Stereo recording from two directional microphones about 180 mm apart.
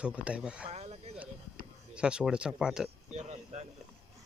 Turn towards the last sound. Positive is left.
turn(degrees=-35)  # may be behind; listen again after turning